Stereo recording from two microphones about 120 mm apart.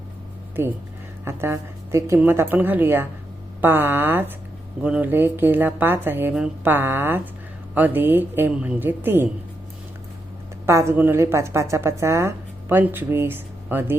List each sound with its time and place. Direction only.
0.6 s a woman's voice: 20° right (ahead or behind)
6.3 s speech: 5° right (ahead or behind)
6.7 s a woman's voice: 20° right (ahead or behind)
10.7 s a woman's voice: 25° right (ahead or behind)